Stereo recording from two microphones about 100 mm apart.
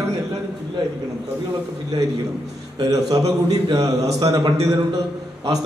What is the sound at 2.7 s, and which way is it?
A man's voice, 40° right (ahead or behind).